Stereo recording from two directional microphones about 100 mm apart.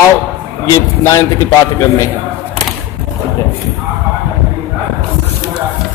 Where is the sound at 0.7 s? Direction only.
30° left (ahead or behind).